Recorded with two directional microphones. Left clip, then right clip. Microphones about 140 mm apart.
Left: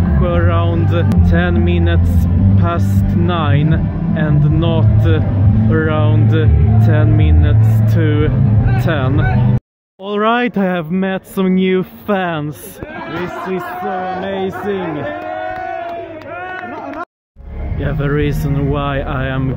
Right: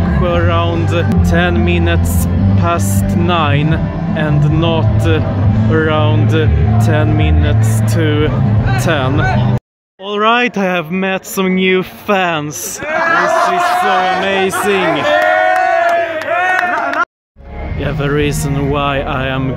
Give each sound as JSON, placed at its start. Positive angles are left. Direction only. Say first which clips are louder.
{"t": 0.2, "sound": "music", "louder": "right 3 dB", "side_deg": -15}
{"t": 1.2, "sound": "speech", "louder": "right 3 dB", "side_deg": -15}
{"t": 10.1, "sound": "speech", "louder": "right 3 dB", "side_deg": -5}
{"t": 14.2, "sound": "speech", "louder": "right 7 dB", "side_deg": -15}
{"t": 18.0, "sound": "speech", "louder": "right 3 dB", "side_deg": -15}